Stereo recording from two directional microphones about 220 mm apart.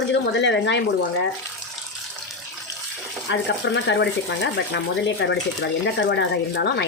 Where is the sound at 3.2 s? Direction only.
55° left (ahead or behind).